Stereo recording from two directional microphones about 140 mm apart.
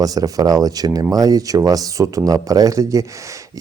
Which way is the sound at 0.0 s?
25° right (ahead or behind).